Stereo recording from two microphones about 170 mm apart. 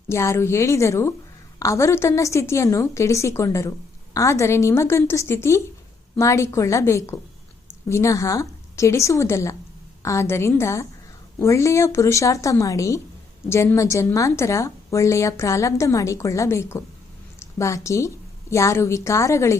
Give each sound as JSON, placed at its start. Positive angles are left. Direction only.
{"t": 0.1, "sound": "a woman's voice", "side_deg": 15}